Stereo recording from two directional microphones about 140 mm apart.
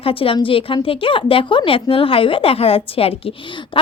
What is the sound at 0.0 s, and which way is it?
A woman's voice, 40° left (ahead or behind).